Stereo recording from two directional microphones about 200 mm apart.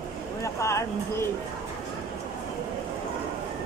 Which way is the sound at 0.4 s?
15° left (ahead or behind).